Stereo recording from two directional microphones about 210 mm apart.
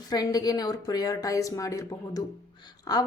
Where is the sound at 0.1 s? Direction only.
20° left (ahead or behind).